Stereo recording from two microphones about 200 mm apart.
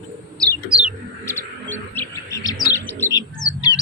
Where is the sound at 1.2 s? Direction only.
10° left (ahead or behind).